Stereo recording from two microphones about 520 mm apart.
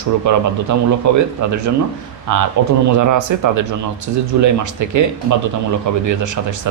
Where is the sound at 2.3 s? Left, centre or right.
Right.